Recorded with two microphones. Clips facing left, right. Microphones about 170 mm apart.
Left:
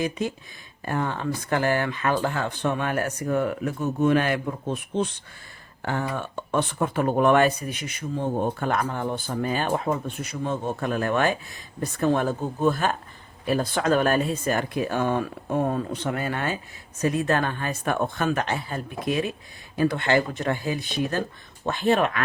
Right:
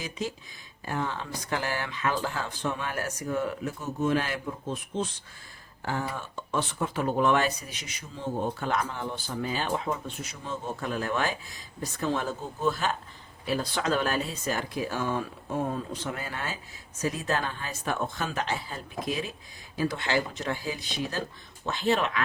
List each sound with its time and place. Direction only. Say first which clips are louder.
0.0 s speech: left 7 dB; 55° left (ahead or behind)